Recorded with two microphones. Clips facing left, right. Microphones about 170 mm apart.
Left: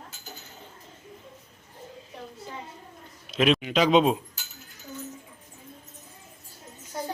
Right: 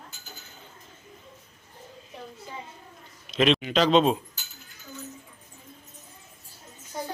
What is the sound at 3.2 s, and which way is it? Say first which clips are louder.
Speech: even; 5° left (ahead or behind).